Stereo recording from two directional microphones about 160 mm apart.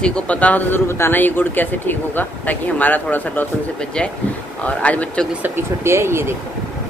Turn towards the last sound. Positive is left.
turn(degrees=-15)  # may be behind; listen again after turning